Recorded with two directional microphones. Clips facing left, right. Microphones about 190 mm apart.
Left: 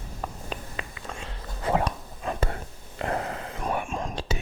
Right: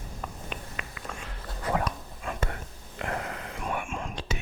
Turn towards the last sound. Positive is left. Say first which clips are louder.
# left 4 dB
turn(degrees=35)  # may be behind; listen again after turning